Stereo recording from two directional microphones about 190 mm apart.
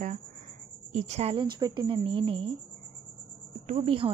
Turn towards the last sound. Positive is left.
turn(degrees=-30)  # may be behind; listen again after turning